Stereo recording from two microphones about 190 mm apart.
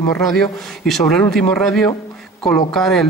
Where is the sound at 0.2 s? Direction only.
Centre (ahead or behind).